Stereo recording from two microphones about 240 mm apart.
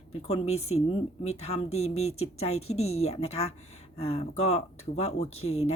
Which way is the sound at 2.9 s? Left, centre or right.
Left.